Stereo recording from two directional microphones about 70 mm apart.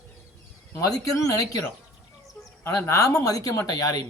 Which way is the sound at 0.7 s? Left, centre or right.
Left.